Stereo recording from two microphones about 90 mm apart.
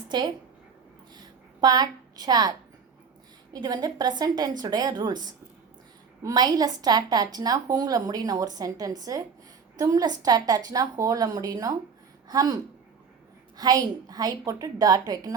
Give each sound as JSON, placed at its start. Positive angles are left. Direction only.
{"t": 0.1, "sound": "a woman's voice", "side_deg": -55}
{"t": 1.6, "sound": "a woman's voice", "side_deg": -50}
{"t": 13.6, "sound": "a woman's voice", "side_deg": -45}